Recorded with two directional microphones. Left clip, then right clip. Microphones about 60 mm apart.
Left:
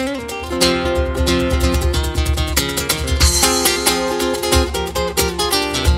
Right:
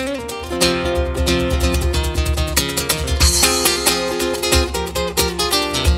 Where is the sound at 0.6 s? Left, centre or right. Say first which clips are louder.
Left 1 dB; left.